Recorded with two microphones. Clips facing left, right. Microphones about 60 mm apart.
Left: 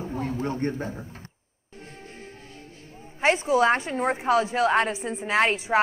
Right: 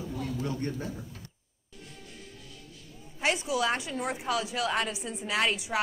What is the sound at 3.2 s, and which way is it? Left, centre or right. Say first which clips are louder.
Speech: left 8 dB; left.